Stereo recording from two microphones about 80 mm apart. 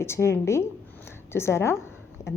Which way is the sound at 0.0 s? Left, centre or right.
Left.